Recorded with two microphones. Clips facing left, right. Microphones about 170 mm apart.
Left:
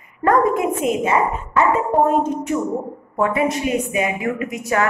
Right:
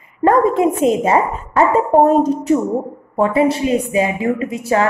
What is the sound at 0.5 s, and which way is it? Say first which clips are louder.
A woman's voice: right 5 dB; 30° right (ahead or behind).